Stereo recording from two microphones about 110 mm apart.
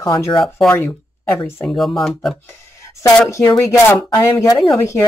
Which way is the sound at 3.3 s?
30° left (ahead or behind).